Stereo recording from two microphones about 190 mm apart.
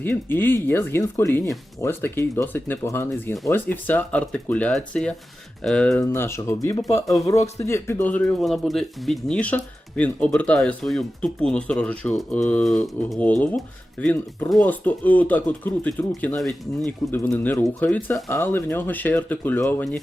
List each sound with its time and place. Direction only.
0.0 s speech: 10° left (ahead or behind)